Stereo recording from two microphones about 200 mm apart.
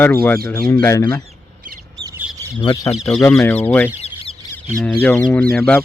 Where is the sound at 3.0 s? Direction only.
5° left (ahead or behind).